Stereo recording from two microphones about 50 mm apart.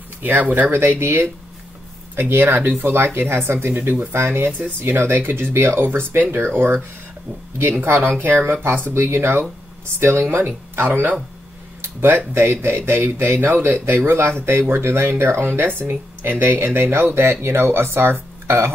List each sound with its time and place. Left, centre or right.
0.2 s speech: right
0.7 s speech: right
7.8 s speech: right
11.8 s speech: right
14.4 s speech: right
15.8 s speech: right